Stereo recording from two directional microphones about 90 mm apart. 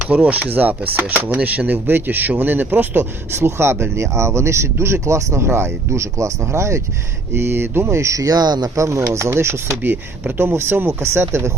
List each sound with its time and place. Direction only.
0.0 s speech: 15° right (ahead or behind); by 9.6 s 30° right (ahead or behind)
9.6 s speech: 20° right (ahead or behind)